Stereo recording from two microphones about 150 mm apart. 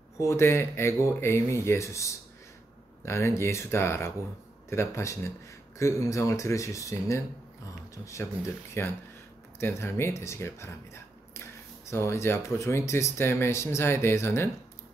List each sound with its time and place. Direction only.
0.2 s speech: 20° left (ahead or behind)